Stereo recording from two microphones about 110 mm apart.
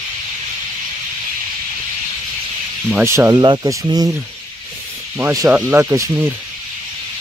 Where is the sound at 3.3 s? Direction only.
40° right (ahead or behind).